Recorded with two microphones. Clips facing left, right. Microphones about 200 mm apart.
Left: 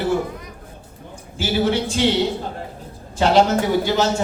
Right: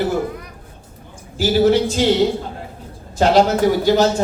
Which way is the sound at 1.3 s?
40° right (ahead or behind).